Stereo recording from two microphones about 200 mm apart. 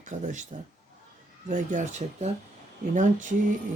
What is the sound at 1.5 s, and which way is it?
Speech, 40° right (ahead or behind).